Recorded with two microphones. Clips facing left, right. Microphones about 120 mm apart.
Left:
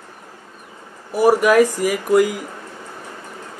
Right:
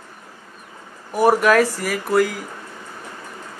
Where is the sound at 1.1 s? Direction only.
10° left (ahead or behind).